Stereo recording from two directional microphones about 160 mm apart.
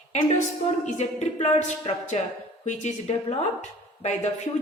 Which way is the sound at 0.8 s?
45° left (ahead or behind).